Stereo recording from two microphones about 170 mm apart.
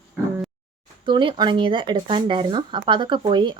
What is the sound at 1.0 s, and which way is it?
Speech, 25° right (ahead or behind).